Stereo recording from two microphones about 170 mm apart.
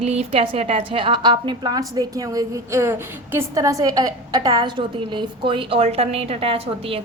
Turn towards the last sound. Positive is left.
turn(degrees=-35)  # may be behind; listen again after turning